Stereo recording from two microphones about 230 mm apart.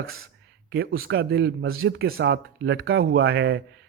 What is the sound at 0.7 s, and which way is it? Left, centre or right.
A man's voice, right.